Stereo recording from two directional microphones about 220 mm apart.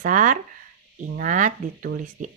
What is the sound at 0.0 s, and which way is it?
Speech, 35° right (ahead or behind).